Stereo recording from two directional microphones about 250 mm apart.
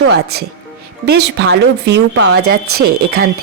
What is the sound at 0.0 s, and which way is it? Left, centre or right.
Speech, right.